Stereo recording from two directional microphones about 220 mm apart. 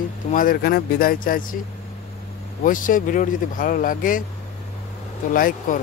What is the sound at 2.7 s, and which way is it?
Speech, 35° left (ahead or behind).